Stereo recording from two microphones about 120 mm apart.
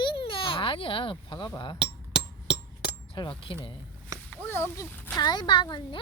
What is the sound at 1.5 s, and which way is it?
Speech, 35° left (ahead or behind).